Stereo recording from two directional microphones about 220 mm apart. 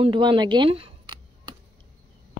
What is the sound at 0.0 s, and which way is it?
Speech, 20° right (ahead or behind).